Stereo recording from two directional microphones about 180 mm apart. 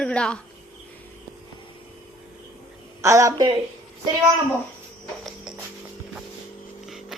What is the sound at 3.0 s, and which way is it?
Speech, 15° right (ahead or behind).